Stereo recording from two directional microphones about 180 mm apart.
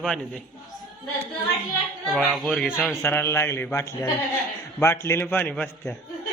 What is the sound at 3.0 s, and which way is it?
A man's voice, 15° left (ahead or behind).